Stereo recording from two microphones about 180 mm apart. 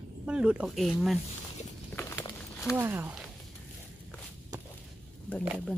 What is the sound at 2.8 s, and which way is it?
Speech, 10° right (ahead or behind).